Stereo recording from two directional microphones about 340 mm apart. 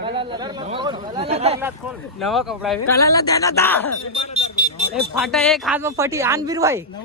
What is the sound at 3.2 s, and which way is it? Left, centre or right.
Speech, centre.